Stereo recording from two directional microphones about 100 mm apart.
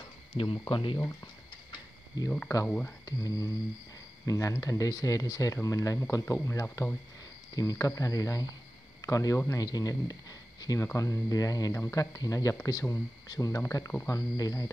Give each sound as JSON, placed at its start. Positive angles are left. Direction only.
{"t": 0.4, "sound": "speech", "side_deg": 60}
{"t": 0.9, "sound": "speech", "side_deg": 30}
{"t": 1.7, "sound": "mechanisms", "side_deg": 40}
{"t": 3.1, "sound": "speech", "side_deg": 35}